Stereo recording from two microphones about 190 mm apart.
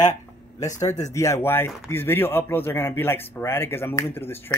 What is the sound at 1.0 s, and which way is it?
Speech, 15° left (ahead or behind).